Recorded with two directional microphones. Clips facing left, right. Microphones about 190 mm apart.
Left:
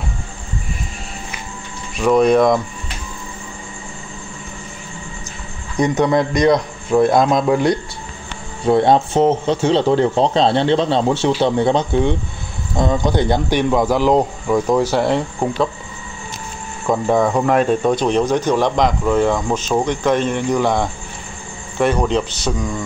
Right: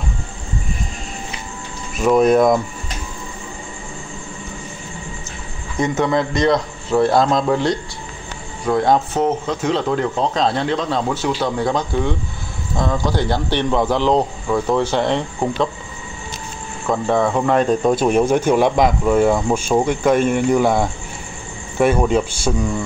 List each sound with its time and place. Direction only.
2.0 s speech: 5° right (ahead or behind)
5.8 s speech: 20° left (ahead or behind)
8.6 s speech: 25° left (ahead or behind); by 15.7 s 5° left (ahead or behind)
16.9 s speech: 10° left (ahead or behind); by 22.8 s 10° right (ahead or behind)